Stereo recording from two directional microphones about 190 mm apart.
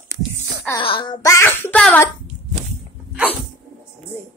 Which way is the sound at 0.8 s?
25° left (ahead or behind).